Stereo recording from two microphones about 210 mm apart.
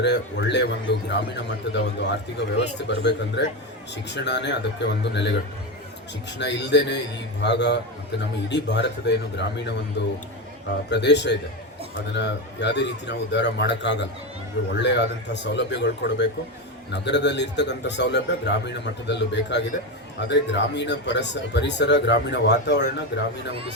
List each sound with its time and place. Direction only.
0.0 s a man's voice: 55° left (ahead or behind)
6.4 s a man's voice: 55° left (ahead or behind)